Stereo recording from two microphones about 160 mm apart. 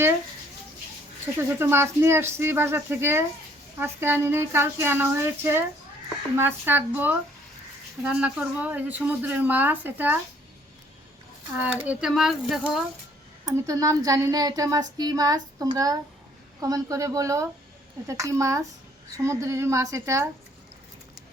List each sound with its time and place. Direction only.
1.4 s a woman's voice: 15° right (ahead or behind)
11.5 s speech: 10° right (ahead or behind)
13.4 s speech: 20° right (ahead or behind)